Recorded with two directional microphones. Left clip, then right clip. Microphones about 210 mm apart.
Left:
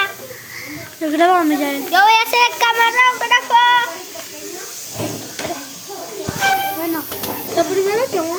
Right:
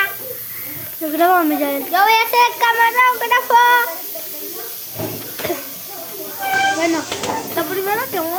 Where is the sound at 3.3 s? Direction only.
20° right (ahead or behind).